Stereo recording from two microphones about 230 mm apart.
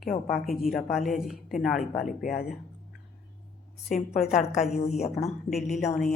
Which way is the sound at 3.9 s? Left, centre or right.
Left.